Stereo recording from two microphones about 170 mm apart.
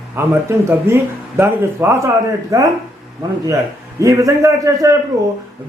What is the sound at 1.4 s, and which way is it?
A man's voice, 15° right (ahead or behind).